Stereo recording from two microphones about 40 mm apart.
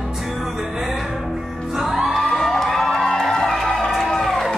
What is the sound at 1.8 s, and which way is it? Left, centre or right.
Music, centre.